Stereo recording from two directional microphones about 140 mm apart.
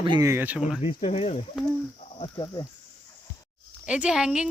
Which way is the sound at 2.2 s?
35° left (ahead or behind).